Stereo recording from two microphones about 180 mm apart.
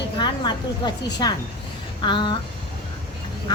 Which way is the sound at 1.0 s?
25° left (ahead or behind).